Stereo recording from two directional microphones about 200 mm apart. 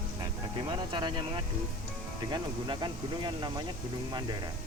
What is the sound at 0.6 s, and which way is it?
Speech, 25° right (ahead or behind).